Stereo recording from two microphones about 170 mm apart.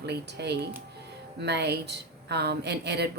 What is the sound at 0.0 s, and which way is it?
A woman's voice, 80° right.